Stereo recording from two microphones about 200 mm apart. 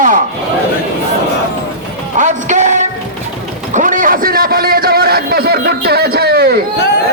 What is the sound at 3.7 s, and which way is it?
A man's voice, 40° right (ahead or behind).